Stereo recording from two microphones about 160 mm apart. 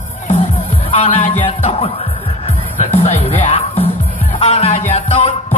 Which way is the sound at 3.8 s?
35° left (ahead or behind).